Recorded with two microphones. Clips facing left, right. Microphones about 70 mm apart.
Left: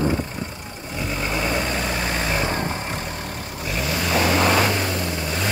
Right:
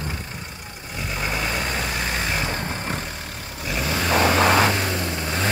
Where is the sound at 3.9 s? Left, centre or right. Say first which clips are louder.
Right 1 dB; right.